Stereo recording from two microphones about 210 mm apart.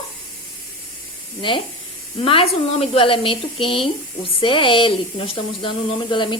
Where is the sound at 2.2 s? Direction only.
25° left (ahead or behind).